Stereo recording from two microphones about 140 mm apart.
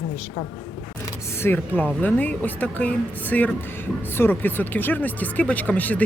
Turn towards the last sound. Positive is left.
turn(degrees=10)  # may be behind; listen again after turning